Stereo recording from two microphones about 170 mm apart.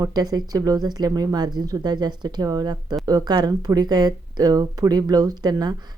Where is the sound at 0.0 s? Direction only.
25° right (ahead or behind).